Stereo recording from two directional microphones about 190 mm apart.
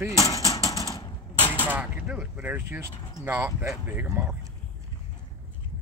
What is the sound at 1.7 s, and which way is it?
Speech, 10° right (ahead or behind).